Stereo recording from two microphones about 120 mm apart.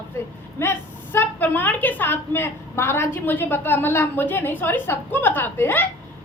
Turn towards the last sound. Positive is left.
turn(degrees=20)  # may be behind; listen again after turning